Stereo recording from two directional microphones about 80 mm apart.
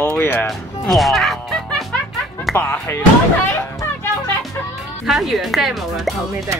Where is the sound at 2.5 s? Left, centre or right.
Left.